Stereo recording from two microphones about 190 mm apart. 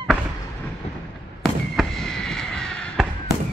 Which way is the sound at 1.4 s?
Centre (ahead or behind).